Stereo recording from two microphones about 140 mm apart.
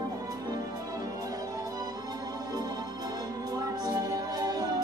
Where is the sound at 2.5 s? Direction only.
25° right (ahead or behind).